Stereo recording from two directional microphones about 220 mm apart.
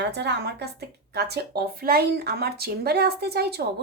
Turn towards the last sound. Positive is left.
turn(degrees=-45)  # may be behind; listen again after turning